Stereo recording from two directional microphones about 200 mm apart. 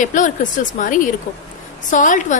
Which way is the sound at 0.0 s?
40° left (ahead or behind).